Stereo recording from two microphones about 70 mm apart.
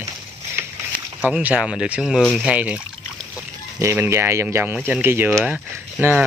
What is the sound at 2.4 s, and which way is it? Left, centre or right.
Speech, centre.